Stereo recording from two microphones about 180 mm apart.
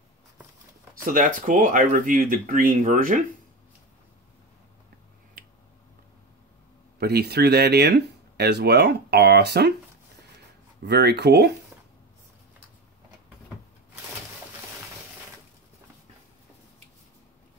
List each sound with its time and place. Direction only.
1.0 s speech: 50° right (ahead or behind)
7.0 s speech: 60° right (ahead or behind)
10.8 s speech: 65° right (ahead or behind)